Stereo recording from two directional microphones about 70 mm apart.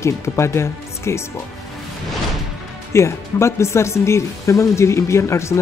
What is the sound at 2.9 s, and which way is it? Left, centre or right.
Speech, left.